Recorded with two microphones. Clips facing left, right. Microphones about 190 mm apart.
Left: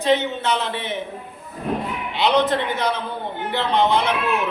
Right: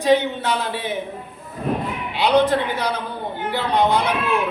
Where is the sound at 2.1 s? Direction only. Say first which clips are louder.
Right 2 dB; 10° right (ahead or behind).